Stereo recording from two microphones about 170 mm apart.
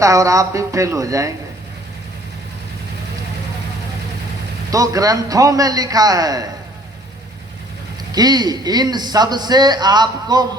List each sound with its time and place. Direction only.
0.0 s a man's voice: 20° right (ahead or behind)
4.7 s a man's voice: 20° right (ahead or behind)
8.1 s a man's voice: 25° right (ahead or behind)